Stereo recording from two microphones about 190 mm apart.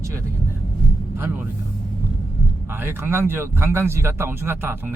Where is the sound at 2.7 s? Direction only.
10° right (ahead or behind).